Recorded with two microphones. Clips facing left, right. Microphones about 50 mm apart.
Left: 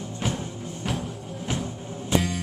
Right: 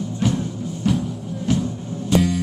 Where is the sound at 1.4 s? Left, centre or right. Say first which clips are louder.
Right 8 dB; centre.